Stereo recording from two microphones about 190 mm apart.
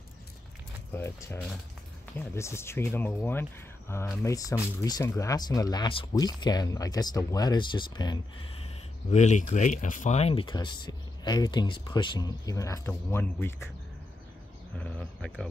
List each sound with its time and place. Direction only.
0.9 s speech: 15° left (ahead or behind)
9.1 s speech: 40° left (ahead or behind); by 13.7 s 10° left (ahead or behind)
14.8 s speech: 5° left (ahead or behind)